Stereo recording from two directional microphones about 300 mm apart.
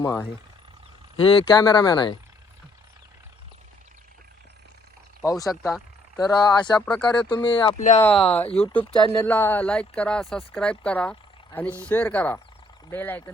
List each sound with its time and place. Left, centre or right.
0.0 s speech: centre
5.2 s speech: centre
8.0 s speech: centre